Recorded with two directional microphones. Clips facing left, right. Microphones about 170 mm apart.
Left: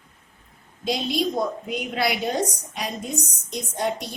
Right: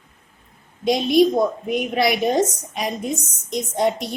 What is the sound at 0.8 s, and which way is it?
A woman's voice, 20° right (ahead or behind).